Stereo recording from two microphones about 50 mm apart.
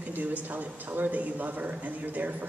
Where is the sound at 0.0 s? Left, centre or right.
Right.